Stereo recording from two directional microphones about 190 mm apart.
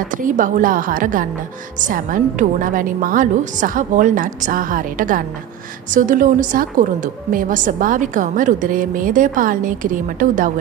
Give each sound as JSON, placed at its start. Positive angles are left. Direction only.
{"t": 0.1, "sound": "speech", "side_deg": -45}